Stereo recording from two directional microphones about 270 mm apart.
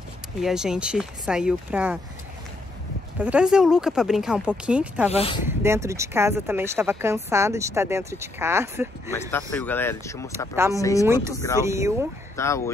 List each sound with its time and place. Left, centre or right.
0.4 s speech: centre
3.2 s speech: centre
5.1 s speech: left
5.5 s speech: centre
9.1 s speech: centre
10.5 s speech: centre
10.8 s speech: centre
11.6 s speech: centre
12.4 s speech: centre